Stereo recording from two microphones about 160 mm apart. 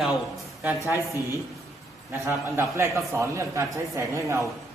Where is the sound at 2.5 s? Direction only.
15° right (ahead or behind).